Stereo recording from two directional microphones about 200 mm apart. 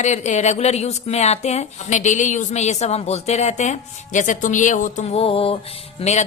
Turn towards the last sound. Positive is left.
turn(degrees=35)  # may be behind; listen again after turning